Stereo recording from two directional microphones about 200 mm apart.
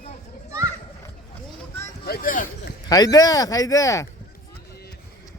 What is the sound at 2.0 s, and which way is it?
Speech, 50° left (ahead or behind).